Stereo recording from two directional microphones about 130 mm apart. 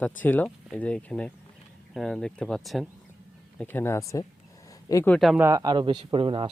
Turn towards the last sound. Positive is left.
turn(degrees=-45)  # may be behind; listen again after turning